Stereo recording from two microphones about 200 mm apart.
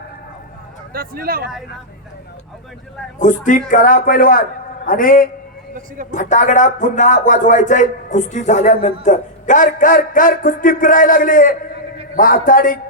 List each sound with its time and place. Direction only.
0.9 s speech: 50° right (ahead or behind)
3.2 s a man's voice: 40° left (ahead or behind)